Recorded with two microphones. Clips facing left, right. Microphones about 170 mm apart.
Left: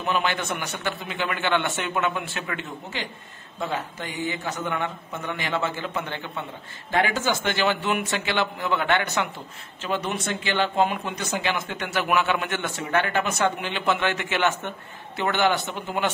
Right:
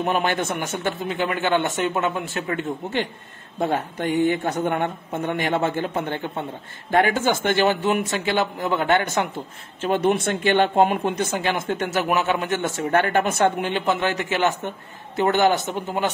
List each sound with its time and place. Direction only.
0.0 s speech: 45° right (ahead or behind)